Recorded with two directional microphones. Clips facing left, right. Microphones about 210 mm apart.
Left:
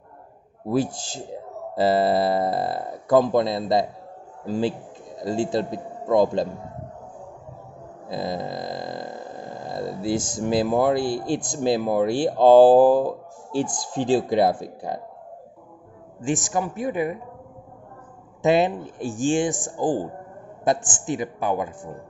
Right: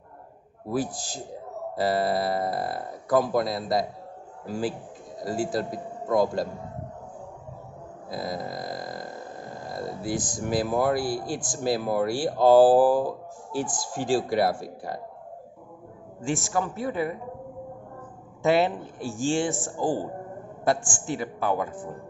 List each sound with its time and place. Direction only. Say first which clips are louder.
0.7 s speech: left 5 dB; 25° left (ahead or behind)
6.0 s speech: left 4 dB; 20° left (ahead or behind)
8.1 s burping: left 4 dB; 25° left (ahead or behind)
10.5 s speech: left 4 dB; 20° left (ahead or behind)
16.2 s speech: left 3 dB; 15° left (ahead or behind)
18.4 s speech: left 3 dB; 20° left (ahead or behind)